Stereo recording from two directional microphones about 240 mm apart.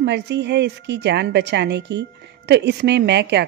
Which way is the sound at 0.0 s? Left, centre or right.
Right.